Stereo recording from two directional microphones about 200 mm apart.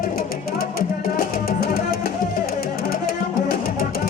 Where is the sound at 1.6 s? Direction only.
45° left (ahead or behind).